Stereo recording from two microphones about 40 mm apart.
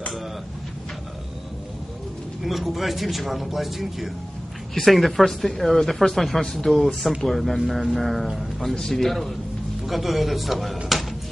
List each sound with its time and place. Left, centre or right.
2.4 s a man's voice: centre
8.7 s a man's voice: centre